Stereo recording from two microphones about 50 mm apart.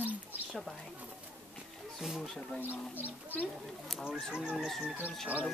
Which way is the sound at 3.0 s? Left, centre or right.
Left.